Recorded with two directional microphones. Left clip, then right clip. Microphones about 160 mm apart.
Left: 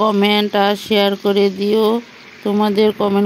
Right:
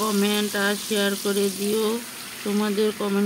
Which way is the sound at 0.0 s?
45° left (ahead or behind).